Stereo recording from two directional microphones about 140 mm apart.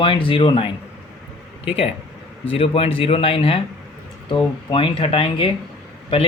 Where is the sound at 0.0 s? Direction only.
40° left (ahead or behind).